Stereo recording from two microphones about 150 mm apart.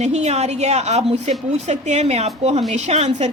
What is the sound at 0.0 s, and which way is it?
A woman's voice, 50° right (ahead or behind).